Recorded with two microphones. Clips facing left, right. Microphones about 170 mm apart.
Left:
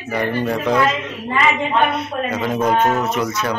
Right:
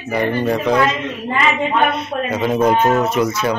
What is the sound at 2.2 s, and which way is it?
Speech, 5° right (ahead or behind).